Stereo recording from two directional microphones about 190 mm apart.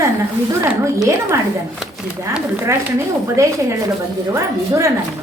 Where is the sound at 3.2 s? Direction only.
15° right (ahead or behind).